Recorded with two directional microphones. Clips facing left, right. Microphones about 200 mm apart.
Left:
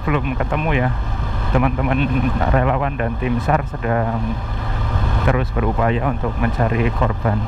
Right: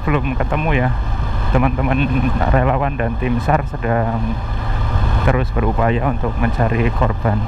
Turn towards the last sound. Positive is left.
turn(degrees=-20)  # may be behind; listen again after turning